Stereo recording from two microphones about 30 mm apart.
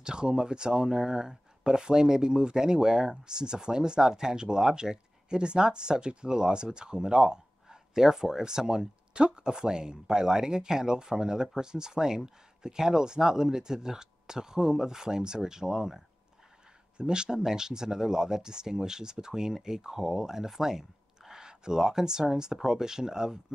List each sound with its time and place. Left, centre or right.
0.0 s speech: right
9.1 s speech: right; by 16.0 s centre
16.9 s speech: right